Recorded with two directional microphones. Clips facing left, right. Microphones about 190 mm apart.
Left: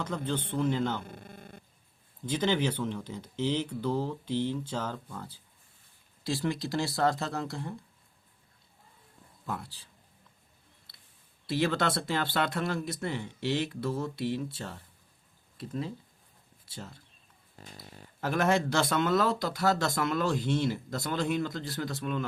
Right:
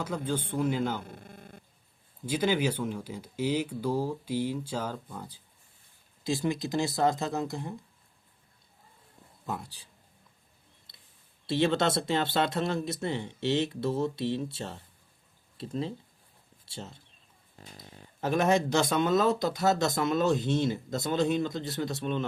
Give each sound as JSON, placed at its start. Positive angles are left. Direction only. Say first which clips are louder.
{"t": 0.0, "sound": "speech", "louder": "right 1 dB", "side_deg": -10}
{"t": 2.2, "sound": "speech", "louder": "right 1 dB", "side_deg": -10}
{"t": 9.5, "sound": "speech", "louder": "right 1 dB", "side_deg": -15}
{"t": 10.9, "sound": "clicking", "louder": "right 1 dB", "side_deg": -20}
{"t": 11.4, "sound": "speech", "louder": "right 3 dB", "side_deg": -25}